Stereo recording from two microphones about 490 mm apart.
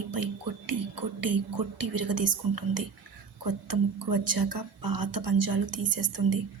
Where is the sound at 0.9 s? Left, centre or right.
Right.